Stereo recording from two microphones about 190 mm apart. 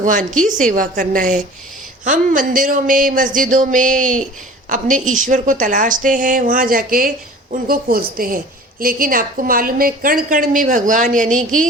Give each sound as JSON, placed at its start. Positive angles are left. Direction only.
{"t": 0.7, "sound": "a woman's voice", "side_deg": -45}